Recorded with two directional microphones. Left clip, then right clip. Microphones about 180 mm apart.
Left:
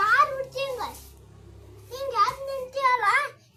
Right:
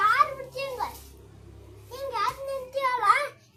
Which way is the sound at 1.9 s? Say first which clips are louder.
Left 6 dB; 20° left (ahead or behind).